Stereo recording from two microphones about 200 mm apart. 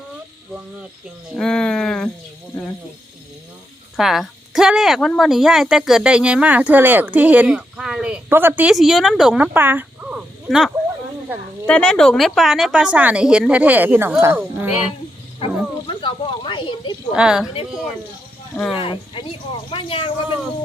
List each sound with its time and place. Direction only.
1.4 s speech: 5° left (ahead or behind)
3.9 s speech: centre (ahead or behind)
15.9 s snake: 25° left (ahead or behind)
17.1 s speech: 5° right (ahead or behind)
18.7 s speech: 25° left (ahead or behind)